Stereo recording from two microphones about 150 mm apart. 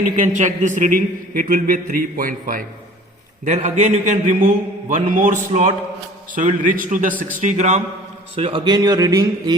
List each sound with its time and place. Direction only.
0.2 s a man's voice: 55° right (ahead or behind)
3.4 s a man's voice: 55° right (ahead or behind)
7.4 s a man's voice: 50° right (ahead or behind)
8.4 s a man's voice: 35° right (ahead or behind)